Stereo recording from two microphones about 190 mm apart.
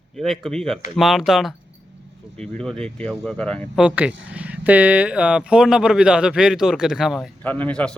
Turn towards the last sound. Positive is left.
turn(degrees=5)  # may be behind; listen again after turning